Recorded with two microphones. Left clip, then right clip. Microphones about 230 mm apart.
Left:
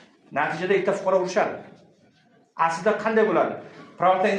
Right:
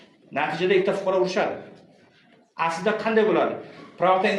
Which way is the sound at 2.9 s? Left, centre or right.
Left.